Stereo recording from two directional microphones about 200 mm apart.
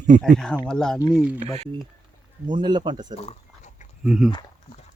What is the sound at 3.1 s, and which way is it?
Speech, 30° left (ahead or behind).